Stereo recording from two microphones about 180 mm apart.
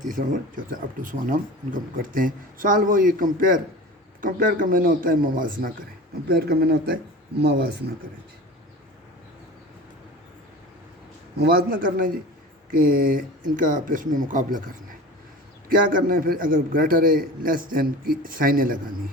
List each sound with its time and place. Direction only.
0.2 s speech: 50° right (ahead or behind); by 7.6 s 65° right (ahead or behind)
11.3 s speech: 60° right (ahead or behind)
15.7 s speech: 50° right (ahead or behind)